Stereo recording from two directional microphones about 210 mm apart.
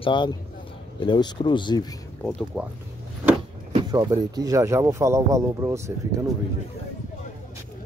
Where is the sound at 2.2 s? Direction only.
Centre (ahead or behind).